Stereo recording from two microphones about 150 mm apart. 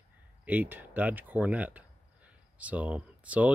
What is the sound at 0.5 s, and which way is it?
Speech, 10° right (ahead or behind).